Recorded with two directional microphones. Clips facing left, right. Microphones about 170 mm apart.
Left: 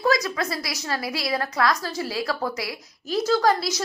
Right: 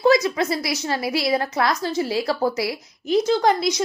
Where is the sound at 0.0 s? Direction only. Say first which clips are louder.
Right 6 dB; 25° right (ahead or behind).